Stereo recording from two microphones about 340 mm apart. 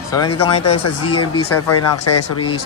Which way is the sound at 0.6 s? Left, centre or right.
Left.